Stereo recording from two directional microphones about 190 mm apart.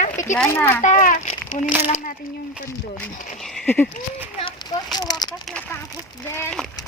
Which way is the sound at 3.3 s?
Centre (ahead or behind).